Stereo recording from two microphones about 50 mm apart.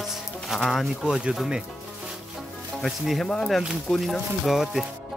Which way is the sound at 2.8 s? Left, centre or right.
Centre.